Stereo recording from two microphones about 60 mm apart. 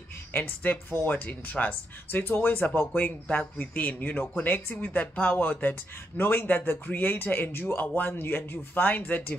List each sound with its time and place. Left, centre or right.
0.3 s speech: left